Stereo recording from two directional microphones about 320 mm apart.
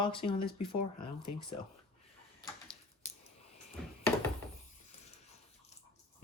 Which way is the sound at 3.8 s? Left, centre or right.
Centre.